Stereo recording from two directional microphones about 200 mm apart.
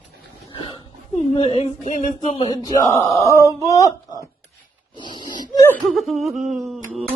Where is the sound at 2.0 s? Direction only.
25° left (ahead or behind).